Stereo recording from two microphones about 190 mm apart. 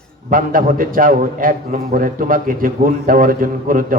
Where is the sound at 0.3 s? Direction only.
45° right (ahead or behind).